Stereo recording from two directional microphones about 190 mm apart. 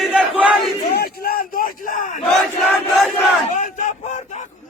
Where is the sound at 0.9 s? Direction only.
55° left (ahead or behind).